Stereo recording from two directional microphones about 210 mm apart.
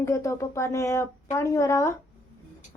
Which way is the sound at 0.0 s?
15° left (ahead or behind).